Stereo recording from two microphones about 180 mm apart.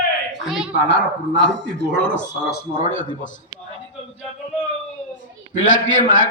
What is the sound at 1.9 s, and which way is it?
Speech, 90° left.